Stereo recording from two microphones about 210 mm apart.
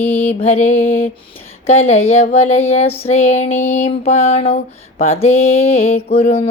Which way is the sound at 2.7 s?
30° left (ahead or behind).